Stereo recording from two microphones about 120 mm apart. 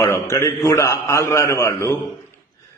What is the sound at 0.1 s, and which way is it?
A man's voice, 25° left (ahead or behind).